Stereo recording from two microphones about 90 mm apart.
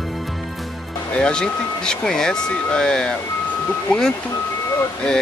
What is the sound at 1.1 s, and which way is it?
Speech, 10° left (ahead or behind).